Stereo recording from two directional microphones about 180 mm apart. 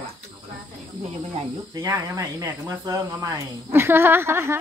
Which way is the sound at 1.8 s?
20° right (ahead or behind).